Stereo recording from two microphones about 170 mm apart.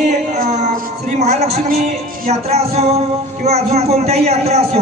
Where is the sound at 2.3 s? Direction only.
40° right (ahead or behind).